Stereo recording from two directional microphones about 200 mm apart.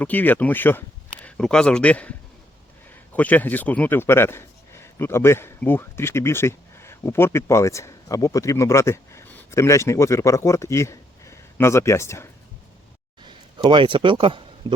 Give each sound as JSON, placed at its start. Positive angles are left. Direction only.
{"t": 0.0, "sound": "speech", "side_deg": 10}
{"t": 13.2, "sound": "speech", "side_deg": -25}